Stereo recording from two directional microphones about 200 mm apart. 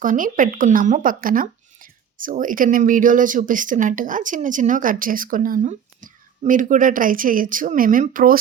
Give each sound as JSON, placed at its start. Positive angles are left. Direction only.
{"t": 0.0, "sound": "speech", "side_deg": -40}